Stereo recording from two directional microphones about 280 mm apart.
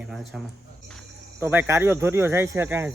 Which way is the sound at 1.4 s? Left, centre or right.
Centre.